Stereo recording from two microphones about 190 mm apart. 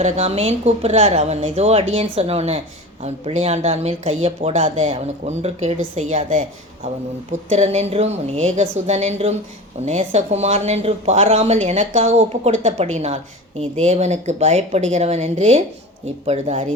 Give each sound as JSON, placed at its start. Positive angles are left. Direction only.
{"t": 0.0, "sound": "speech", "side_deg": -35}
{"t": 7.5, "sound": "speech", "side_deg": -35}